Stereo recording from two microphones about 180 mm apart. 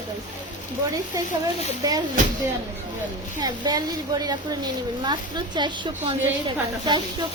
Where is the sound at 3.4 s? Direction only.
20° right (ahead or behind).